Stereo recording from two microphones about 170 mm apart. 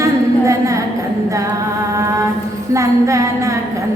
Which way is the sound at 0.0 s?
20° right (ahead or behind).